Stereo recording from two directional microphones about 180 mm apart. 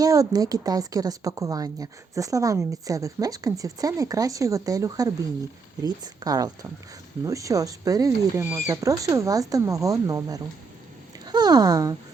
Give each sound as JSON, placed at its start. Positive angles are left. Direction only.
{"t": 0.0, "sound": "speech", "side_deg": -20}